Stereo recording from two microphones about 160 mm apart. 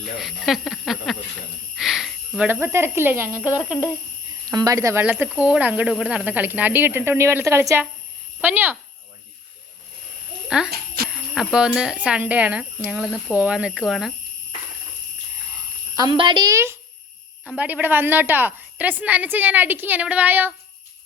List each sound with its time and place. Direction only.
0.2 s speech: centre (ahead or behind)
4.4 s a woman's voice: 25° right (ahead or behind)
10.5 s a woman's voice: 5° right (ahead or behind)
16.0 s speech: 30° right (ahead or behind)
17.4 s a woman's voice: 5° right (ahead or behind)